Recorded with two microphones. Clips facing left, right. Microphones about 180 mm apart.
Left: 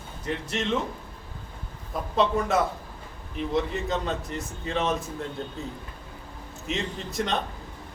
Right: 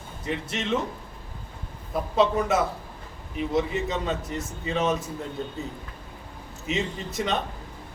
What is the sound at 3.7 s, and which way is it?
A man's voice, 5° right (ahead or behind).